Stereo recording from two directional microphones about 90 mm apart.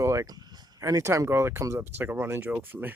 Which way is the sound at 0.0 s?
30° right (ahead or behind).